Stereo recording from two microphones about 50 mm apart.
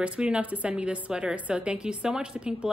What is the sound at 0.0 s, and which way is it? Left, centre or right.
A woman's voice, right.